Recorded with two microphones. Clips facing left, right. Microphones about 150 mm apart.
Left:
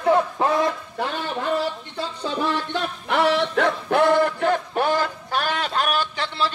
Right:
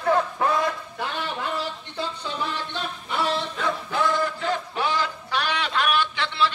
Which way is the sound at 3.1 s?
75° left (ahead or behind).